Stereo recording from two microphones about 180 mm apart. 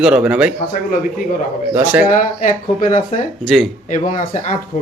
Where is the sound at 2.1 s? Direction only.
45° left (ahead or behind).